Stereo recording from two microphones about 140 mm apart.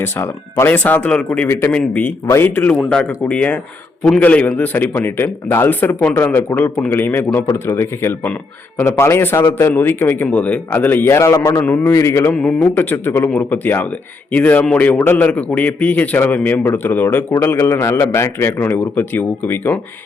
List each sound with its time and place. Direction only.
0.0 s speech: 15° left (ahead or behind)
2.7 s speech: 5° left (ahead or behind); by 12.3 s 20° left (ahead or behind)
12.3 s speech: 5° left (ahead or behind)